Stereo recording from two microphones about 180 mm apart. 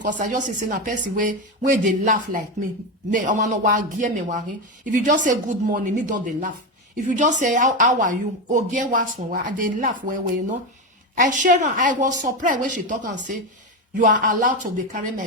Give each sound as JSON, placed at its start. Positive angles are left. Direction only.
{"t": 0.0, "sound": "speech", "side_deg": -45}